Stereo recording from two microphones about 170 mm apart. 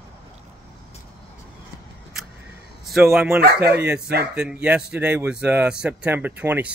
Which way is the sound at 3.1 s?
5° right (ahead or behind).